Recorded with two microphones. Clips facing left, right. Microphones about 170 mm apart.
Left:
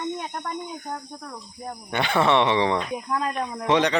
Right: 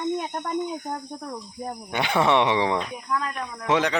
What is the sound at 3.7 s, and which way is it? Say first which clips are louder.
Speech: left 2 dB; 5° right (ahead or behind).